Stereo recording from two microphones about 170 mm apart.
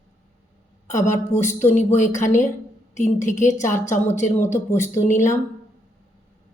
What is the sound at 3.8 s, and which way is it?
Speech, 45° left (ahead or behind).